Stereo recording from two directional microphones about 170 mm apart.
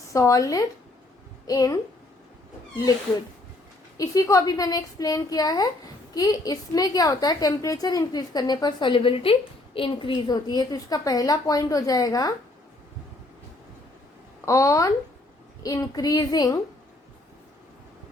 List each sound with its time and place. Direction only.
0.1 s a woman's voice: 20° left (ahead or behind)
3.9 s a woman's voice: 20° left (ahead or behind)
14.4 s a woman's voice: 20° left (ahead or behind)